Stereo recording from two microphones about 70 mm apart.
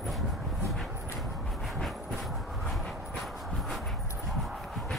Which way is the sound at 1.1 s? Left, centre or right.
Centre.